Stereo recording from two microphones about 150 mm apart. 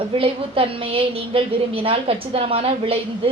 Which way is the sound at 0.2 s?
40° right (ahead or behind).